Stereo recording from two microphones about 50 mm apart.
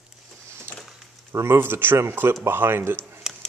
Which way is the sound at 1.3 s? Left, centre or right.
Right.